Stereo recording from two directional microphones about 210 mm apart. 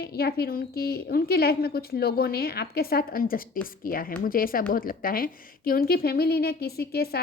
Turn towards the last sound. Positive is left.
turn(degrees=50)  # may be behind; listen again after turning